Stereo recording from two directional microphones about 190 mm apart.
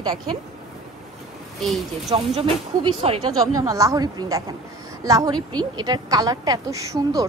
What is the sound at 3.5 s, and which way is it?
A woman's voice, 15° right (ahead or behind).